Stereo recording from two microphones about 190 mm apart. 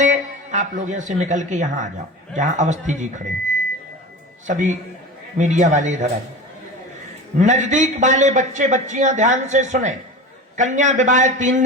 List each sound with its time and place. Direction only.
0.0 s a man's voice: 40° right (ahead or behind)
4.4 s a man's voice: 40° right (ahead or behind)
7.3 s a man's voice: 40° right (ahead or behind)